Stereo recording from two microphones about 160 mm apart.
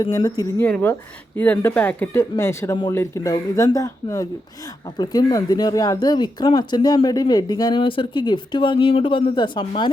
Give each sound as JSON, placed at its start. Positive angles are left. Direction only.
{"t": 0.0, "sound": "speech", "side_deg": 20}
{"t": 0.6, "sound": "speech", "side_deg": 10}